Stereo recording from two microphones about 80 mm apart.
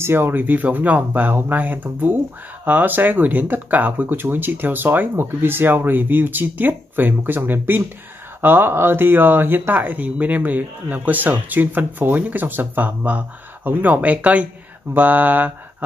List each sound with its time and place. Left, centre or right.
0.0 s speech: right